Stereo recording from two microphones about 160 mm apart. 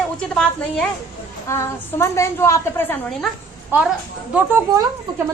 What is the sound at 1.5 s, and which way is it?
A woman's voice, 15° left (ahead or behind).